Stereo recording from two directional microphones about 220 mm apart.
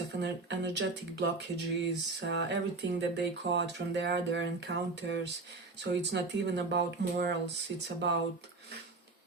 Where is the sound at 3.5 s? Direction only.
50° right (ahead or behind).